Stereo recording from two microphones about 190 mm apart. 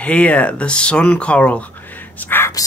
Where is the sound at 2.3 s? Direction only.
15° left (ahead or behind).